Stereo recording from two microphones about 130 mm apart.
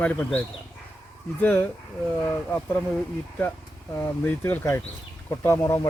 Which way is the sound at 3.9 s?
15° left (ahead or behind).